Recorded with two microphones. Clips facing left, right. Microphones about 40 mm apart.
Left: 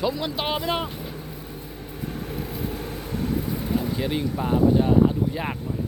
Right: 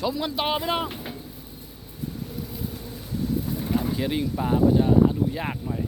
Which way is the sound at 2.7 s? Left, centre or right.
Left.